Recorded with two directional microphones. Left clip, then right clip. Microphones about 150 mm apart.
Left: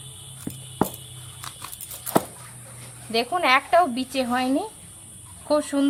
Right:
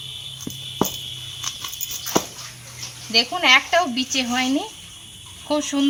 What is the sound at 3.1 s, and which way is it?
Speech, 10° left (ahead or behind).